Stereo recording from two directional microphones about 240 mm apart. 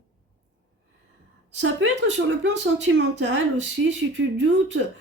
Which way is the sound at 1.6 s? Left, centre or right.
Right.